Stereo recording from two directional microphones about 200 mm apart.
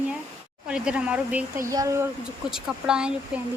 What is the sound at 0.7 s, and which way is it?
Speech, 5° right (ahead or behind).